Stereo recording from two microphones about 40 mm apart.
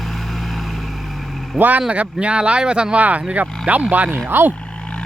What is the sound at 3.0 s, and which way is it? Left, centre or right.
Speech, right.